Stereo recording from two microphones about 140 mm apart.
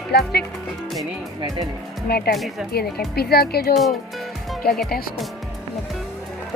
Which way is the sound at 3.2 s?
90° left.